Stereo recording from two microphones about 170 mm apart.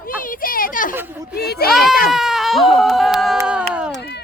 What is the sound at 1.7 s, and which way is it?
Speech, centre (ahead or behind).